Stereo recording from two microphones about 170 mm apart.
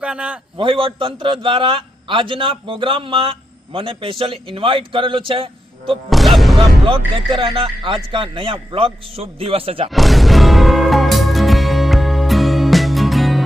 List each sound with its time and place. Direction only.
0.0 s a man's voice: 5° right (ahead or behind)
0.5 s a man's voice: 30° right (ahead or behind)
6.1 s speech: centre (ahead or behind)
6.6 s a man's voice: 30° right (ahead or behind)
9.9 s music: centre (ahead or behind)